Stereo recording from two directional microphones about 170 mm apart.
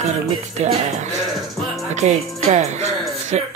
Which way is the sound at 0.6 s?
45° right (ahead or behind).